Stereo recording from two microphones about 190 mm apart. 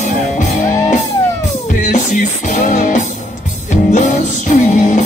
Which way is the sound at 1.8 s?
40° left (ahead or behind).